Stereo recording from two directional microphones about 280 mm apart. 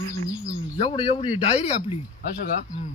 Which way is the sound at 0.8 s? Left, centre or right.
Centre.